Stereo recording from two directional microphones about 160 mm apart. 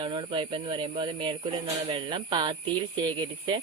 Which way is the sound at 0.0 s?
30° right (ahead or behind).